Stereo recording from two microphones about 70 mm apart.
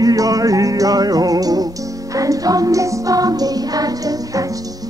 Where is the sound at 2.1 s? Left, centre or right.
Right.